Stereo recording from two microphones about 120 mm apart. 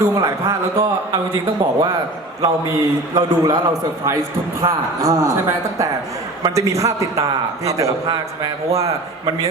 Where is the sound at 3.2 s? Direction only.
30° right (ahead or behind).